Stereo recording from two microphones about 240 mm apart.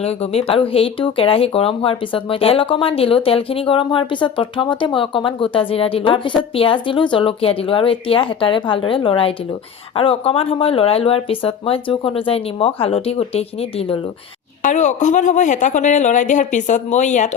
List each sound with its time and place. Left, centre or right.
0.0 s speech: left